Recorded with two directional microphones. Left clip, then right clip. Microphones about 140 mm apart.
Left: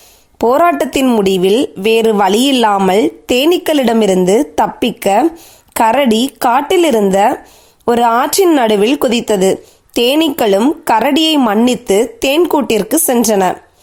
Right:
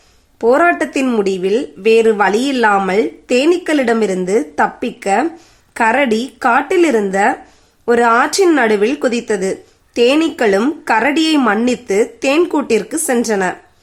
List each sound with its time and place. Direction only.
0.3 s a woman's voice: 60° left (ahead or behind)